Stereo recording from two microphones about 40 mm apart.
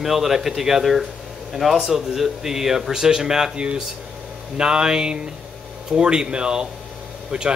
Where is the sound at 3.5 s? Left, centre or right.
Right.